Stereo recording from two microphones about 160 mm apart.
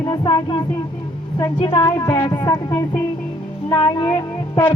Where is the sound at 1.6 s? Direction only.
25° left (ahead or behind).